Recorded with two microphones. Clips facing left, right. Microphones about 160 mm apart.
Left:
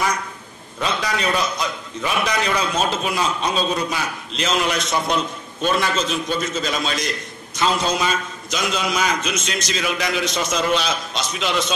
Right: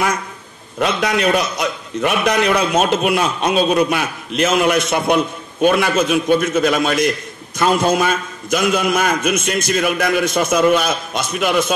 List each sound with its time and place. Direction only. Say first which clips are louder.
0.7 s a man's voice: right 6 dB; 65° right (ahead or behind)